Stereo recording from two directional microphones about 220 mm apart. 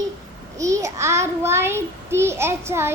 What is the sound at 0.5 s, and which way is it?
A child's voice, 15° right (ahead or behind).